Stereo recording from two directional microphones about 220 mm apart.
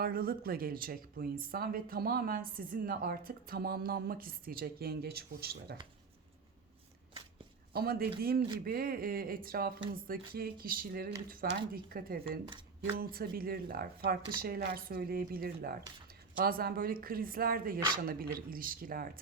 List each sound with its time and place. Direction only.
0.0 s speech: 45° right (ahead or behind)
7.7 s a woman's voice: 45° right (ahead or behind)